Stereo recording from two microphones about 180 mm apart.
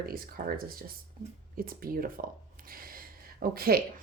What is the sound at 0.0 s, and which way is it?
Speech, 55° right (ahead or behind).